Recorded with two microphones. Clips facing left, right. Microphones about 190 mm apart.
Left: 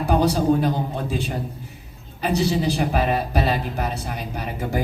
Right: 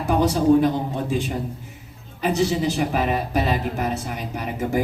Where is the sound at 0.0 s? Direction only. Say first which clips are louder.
Left 1 dB; 35° left (ahead or behind).